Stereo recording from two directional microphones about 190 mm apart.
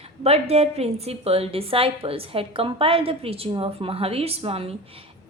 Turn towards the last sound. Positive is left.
turn(degrees=-30)  # may be behind; listen again after turning